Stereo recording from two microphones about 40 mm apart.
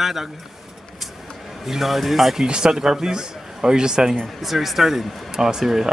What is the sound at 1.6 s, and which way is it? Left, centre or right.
Speech, centre.